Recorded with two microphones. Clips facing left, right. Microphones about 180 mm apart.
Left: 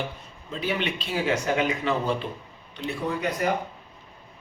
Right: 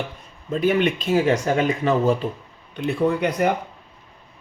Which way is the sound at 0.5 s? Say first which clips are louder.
Right 9 dB; 50° right (ahead or behind).